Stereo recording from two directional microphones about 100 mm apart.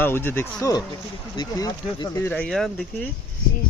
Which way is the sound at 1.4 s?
40° left (ahead or behind).